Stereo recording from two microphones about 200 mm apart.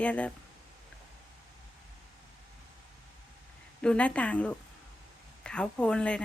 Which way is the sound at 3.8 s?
5° left (ahead or behind).